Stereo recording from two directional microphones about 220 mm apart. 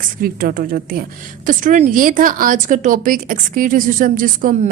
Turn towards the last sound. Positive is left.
turn(degrees=-40)  # may be behind; listen again after turning